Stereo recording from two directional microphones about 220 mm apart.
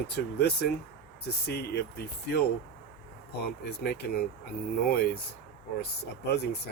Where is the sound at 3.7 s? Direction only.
50° left (ahead or behind).